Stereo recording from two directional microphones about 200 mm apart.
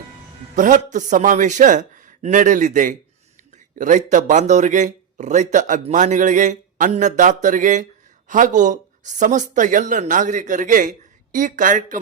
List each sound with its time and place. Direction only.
0.5 s a man's voice: 40° right (ahead or behind)